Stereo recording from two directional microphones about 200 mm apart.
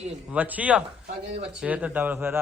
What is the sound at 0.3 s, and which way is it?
A man's voice, 10° right (ahead or behind).